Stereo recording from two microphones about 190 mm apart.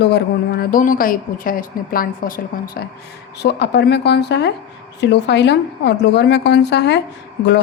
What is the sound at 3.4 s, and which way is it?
A woman's voice, 60° left (ahead or behind).